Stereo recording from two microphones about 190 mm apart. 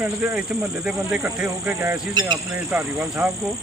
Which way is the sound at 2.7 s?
15° right (ahead or behind).